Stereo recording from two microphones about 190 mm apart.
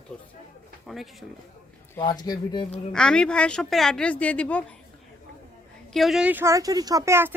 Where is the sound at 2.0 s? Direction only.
20° left (ahead or behind).